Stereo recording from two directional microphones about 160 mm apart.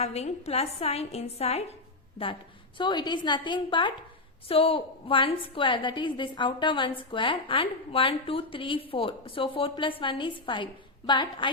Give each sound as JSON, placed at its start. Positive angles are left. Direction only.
{"t": 0.0, "sound": "a woman's voice", "side_deg": 40}
{"t": 2.7, "sound": "a woman's voice", "side_deg": 30}